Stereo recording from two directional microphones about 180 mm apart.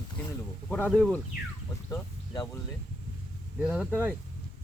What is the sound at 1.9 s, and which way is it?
Speech, 15° left (ahead or behind).